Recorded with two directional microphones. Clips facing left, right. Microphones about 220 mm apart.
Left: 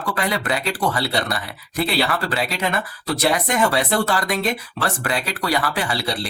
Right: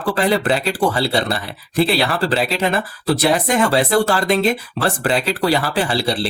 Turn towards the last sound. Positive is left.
turn(degrees=-30)  # may be behind; listen again after turning